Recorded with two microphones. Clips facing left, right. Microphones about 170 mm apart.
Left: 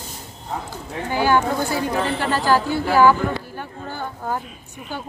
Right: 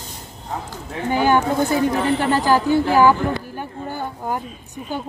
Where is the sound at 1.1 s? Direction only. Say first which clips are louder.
Right 2 dB; 20° right (ahead or behind).